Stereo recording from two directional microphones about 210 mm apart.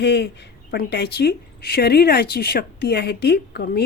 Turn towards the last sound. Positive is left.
turn(degrees=50)  # may be behind; listen again after turning